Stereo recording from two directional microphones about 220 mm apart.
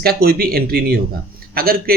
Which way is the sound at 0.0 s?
45° right (ahead or behind).